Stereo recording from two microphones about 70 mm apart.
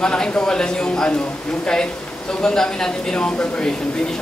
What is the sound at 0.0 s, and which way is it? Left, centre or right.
A man's voice, centre.